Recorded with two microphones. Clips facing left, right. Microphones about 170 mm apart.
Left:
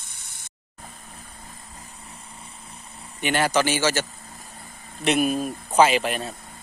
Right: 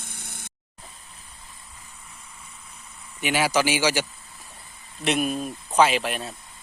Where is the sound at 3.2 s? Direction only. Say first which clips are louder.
Left 1 dB; 5° right (ahead or behind).